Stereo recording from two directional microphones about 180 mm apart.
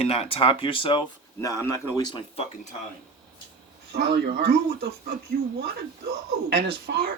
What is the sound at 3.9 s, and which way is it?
Speech, 60° right (ahead or behind).